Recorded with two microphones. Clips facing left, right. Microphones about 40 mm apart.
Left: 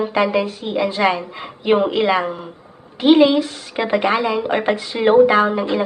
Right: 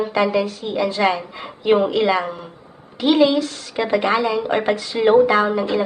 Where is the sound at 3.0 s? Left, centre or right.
Centre.